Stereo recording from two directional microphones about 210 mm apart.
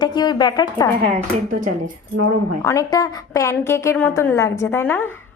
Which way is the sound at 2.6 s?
15° left (ahead or behind).